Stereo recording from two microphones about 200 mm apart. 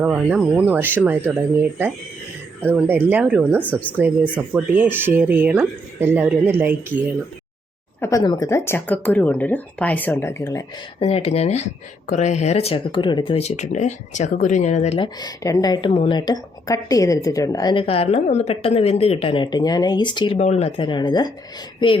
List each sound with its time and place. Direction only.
0.0 s speech: 10° right (ahead or behind)
2.6 s speech: 10° right (ahead or behind)
8.0 s speech: 15° left (ahead or behind)
11.0 s speech: 30° left (ahead or behind)
14.9 s speech: 20° left (ahead or behind)